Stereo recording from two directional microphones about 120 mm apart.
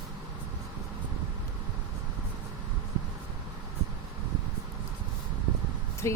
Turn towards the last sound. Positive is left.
turn(degrees=25)  # may be behind; listen again after turning